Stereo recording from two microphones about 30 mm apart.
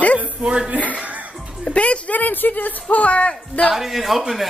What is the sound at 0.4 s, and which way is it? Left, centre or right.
Child singing, right.